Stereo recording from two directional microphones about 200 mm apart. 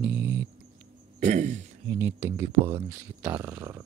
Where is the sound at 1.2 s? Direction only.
35° right (ahead or behind).